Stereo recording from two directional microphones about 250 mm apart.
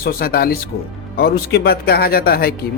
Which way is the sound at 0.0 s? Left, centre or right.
Left.